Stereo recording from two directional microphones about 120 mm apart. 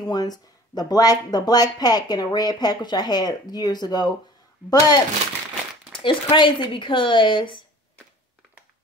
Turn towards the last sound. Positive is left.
turn(degrees=45)  # may be behind; listen again after turning